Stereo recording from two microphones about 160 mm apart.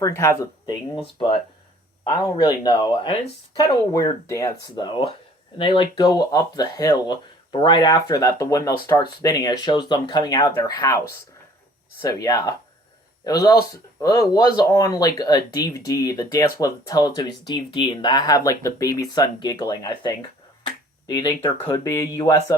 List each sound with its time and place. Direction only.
0.0 s speech: 15° left (ahead or behind)
1.0 s speech: 30° left (ahead or behind)
4.7 s speech: 30° left (ahead or behind)
12.0 s speech: 20° left (ahead or behind)